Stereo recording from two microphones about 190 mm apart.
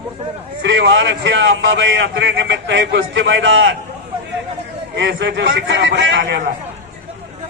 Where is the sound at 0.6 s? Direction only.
75° right (ahead or behind).